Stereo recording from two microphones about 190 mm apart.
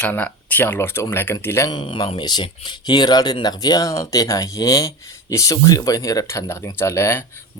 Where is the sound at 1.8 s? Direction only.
25° left (ahead or behind).